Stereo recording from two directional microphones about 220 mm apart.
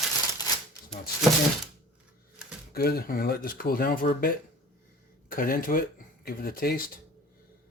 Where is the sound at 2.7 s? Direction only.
45° left (ahead or behind).